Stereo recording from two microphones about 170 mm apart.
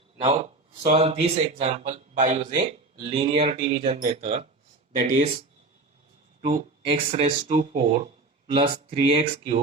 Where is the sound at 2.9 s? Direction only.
30° right (ahead or behind).